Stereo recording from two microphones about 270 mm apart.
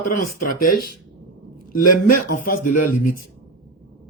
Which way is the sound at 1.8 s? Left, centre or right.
Left.